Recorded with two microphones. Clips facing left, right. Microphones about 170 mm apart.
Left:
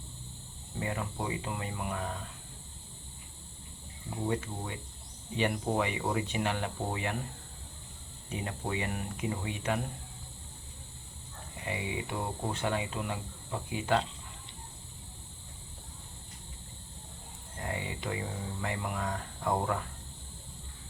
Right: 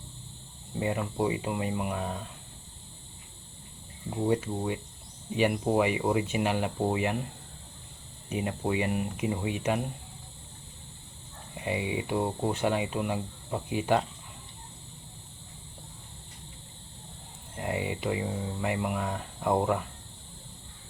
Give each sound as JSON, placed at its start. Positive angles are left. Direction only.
{"t": 0.8, "sound": "speech", "side_deg": -20}
{"t": 4.3, "sound": "speech", "side_deg": -15}
{"t": 8.3, "sound": "speech", "side_deg": -20}
{"t": 11.5, "sound": "speech", "side_deg": -20}
{"t": 17.6, "sound": "speech", "side_deg": -15}